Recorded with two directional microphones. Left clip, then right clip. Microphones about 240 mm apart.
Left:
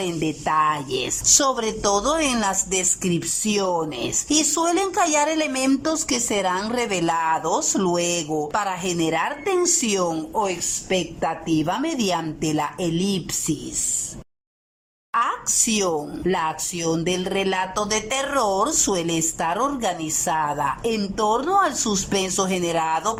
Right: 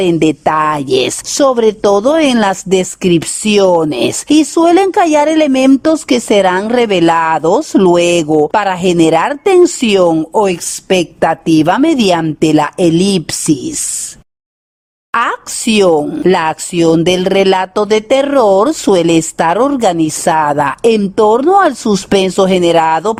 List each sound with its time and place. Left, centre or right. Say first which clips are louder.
0.0 s speech: right 14 dB; right
1.4 s a woman's voice: right 12 dB; right
15.1 s a woman's voice: right 8 dB; right